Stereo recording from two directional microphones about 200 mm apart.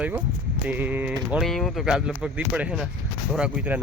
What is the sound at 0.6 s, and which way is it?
Typing, 10° right (ahead or behind).